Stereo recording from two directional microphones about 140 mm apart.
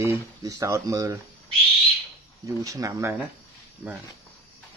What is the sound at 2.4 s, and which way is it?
Speech, 25° right (ahead or behind).